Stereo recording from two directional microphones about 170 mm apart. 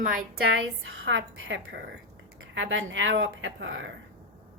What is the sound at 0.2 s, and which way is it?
A woman's voice, 65° right (ahead or behind).